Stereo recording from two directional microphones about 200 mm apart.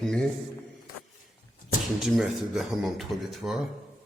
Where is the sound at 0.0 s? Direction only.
5° left (ahead or behind).